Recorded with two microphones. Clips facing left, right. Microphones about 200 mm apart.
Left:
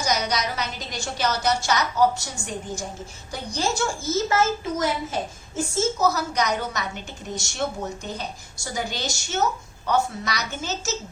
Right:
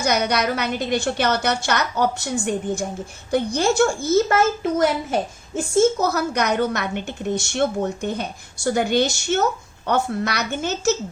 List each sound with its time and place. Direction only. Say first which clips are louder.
0.0 s a woman's voice: right 5 dB; 60° right (ahead or behind)